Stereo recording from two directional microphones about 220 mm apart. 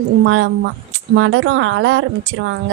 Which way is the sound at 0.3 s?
60° right (ahead or behind).